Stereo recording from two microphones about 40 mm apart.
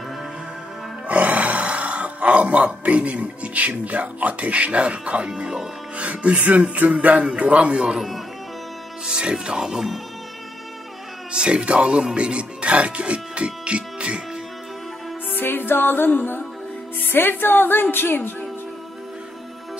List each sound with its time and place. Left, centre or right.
1.0 s speech: right
9.3 s speech: centre
11.3 s speech: right
15.3 s music: left